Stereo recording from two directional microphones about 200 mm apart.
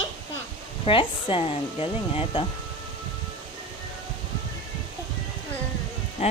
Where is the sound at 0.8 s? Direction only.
25° left (ahead or behind).